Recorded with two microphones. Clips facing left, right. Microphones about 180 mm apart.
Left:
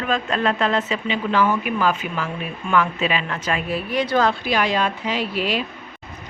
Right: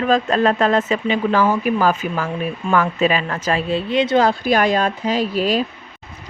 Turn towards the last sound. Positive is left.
turn(degrees=-40)  # may be behind; listen again after turning